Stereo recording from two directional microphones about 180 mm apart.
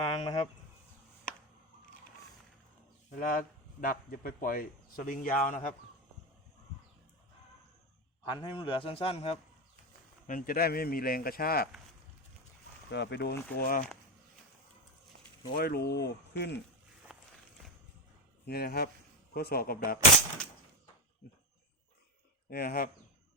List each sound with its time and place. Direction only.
0.0 s a sound: 35° left (ahead or behind)
3.1 s a man's voice: 50° left (ahead or behind)
8.2 s a man's voice: 25° left (ahead or behind)
10.2 s speech: 50° left (ahead or behind)
12.9 s speech: 75° left (ahead or behind); by 13.8 s 55° left (ahead or behind)
15.5 s speech: 60° left (ahead or behind)
17.1 s a sound: centre (ahead or behind)
18.4 s speech: 60° left (ahead or behind)
22.4 s speech: 55° left (ahead or behind)